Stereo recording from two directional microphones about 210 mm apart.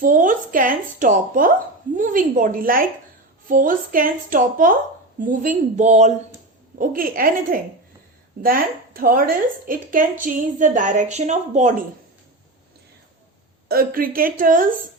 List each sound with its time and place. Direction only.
0.0 s a woman's voice: 40° right (ahead or behind)
13.7 s a woman's voice: 45° right (ahead or behind)